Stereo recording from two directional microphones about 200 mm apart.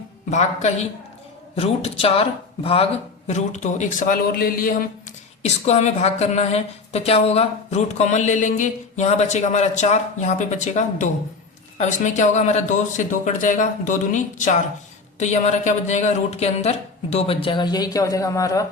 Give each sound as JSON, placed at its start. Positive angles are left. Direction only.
{"t": 0.3, "sound": "a woman's voice", "side_deg": 35}
{"t": 5.4, "sound": "a woman's voice", "side_deg": 35}